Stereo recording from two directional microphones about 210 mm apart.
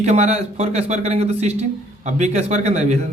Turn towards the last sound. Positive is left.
turn(degrees=-30)  # may be behind; listen again after turning